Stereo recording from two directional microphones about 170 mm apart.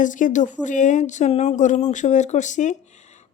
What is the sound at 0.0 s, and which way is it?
Speech, 50° left (ahead or behind).